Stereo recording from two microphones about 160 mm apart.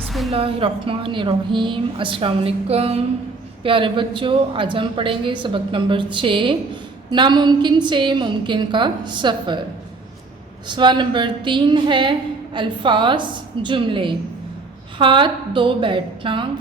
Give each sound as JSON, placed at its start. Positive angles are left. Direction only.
{"t": 0.0, "sound": "a sound", "side_deg": 0}
{"t": 0.3, "sound": "a woman's voice", "side_deg": -35}
{"t": 10.7, "sound": "a woman's voice", "side_deg": -30}